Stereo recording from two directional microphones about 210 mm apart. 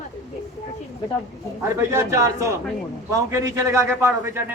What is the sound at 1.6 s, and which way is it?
A man's voice, 15° right (ahead or behind).